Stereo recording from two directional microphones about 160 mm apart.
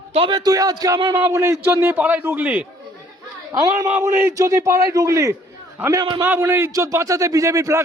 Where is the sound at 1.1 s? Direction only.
15° right (ahead or behind).